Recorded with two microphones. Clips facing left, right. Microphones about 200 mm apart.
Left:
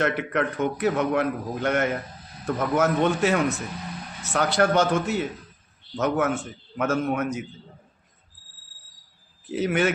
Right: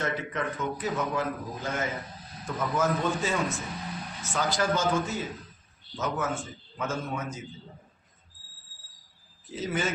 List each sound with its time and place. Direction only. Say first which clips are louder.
0.0 s a man's voice: left 7 dB; 70° left (ahead or behind)
9.5 s a man's voice: left 8 dB; 70° left (ahead or behind)